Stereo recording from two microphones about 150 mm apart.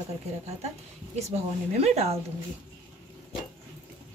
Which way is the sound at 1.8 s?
45° right (ahead or behind).